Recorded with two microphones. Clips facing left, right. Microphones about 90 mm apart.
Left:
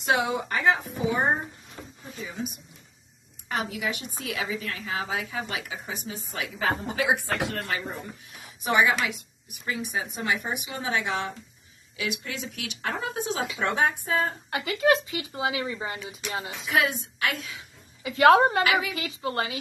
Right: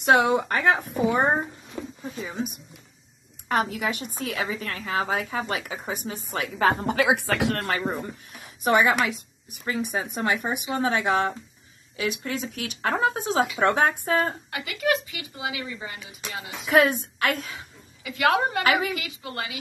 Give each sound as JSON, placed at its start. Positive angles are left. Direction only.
{"t": 0.0, "sound": "speech", "side_deg": -55}
{"t": 3.4, "sound": "a woman's voice", "side_deg": -50}
{"t": 7.7, "sound": "a woman's voice", "side_deg": -50}
{"t": 14.5, "sound": "speech", "side_deg": 30}
{"t": 16.6, "sound": "a woman's voice", "side_deg": -50}
{"t": 18.0, "sound": "speech", "side_deg": 30}
{"t": 18.6, "sound": "a woman's voice", "side_deg": -45}
{"t": 18.9, "sound": "speech", "side_deg": 35}